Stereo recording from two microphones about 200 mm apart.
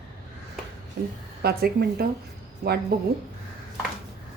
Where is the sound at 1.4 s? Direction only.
50° right (ahead or behind).